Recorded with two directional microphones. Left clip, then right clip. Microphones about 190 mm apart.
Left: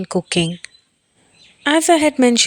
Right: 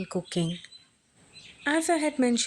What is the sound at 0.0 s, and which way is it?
A woman's voice, 40° left (ahead or behind).